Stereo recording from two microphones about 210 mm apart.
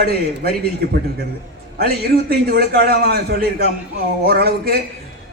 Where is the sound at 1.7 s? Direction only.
45° right (ahead or behind).